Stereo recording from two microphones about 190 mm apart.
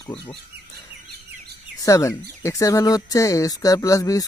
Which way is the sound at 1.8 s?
15° left (ahead or behind).